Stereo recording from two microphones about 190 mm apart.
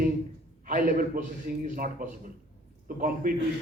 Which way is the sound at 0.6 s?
45° right (ahead or behind).